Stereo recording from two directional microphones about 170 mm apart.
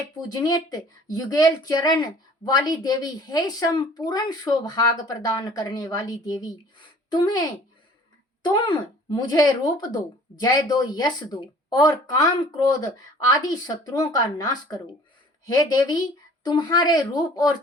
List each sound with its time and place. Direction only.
0.3 s speech: 25° left (ahead or behind)
8.4 s speech: 25° left (ahead or behind)